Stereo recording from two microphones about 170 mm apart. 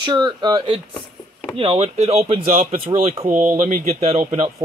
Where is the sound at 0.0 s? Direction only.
25° right (ahead or behind).